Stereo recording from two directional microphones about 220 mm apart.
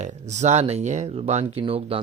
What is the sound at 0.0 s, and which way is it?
Speech, 30° right (ahead or behind).